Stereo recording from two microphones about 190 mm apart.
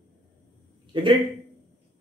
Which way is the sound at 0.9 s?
25° right (ahead or behind).